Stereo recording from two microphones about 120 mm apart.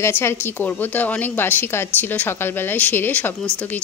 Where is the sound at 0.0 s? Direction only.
20° left (ahead or behind).